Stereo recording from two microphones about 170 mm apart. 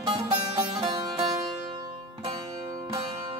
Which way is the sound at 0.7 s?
25° right (ahead or behind).